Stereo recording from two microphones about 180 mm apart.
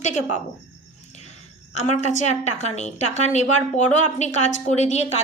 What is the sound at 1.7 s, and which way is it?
A woman's voice, 40° left (ahead or behind).